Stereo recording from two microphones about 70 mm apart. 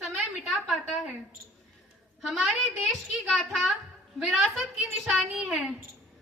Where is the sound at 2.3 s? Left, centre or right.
Centre.